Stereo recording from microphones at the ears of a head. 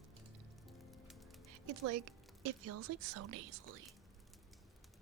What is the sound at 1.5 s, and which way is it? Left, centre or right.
A woman's voice, right.